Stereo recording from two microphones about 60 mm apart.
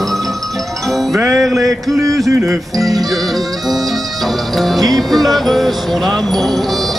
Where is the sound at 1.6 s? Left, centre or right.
Right.